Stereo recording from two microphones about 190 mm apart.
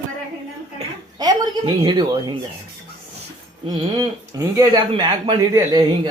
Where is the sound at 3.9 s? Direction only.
20° right (ahead or behind).